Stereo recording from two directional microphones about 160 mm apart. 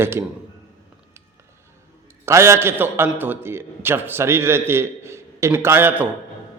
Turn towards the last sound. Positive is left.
turn(degrees=-15)  # may be behind; listen again after turning